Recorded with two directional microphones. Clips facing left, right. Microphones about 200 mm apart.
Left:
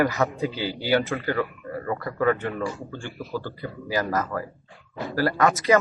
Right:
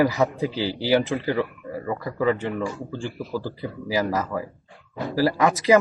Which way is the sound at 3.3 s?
10° right (ahead or behind).